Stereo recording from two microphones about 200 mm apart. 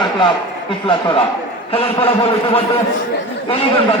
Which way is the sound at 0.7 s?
25° left (ahead or behind).